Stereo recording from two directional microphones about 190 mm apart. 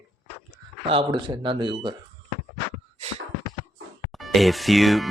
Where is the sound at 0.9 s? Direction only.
25° right (ahead or behind).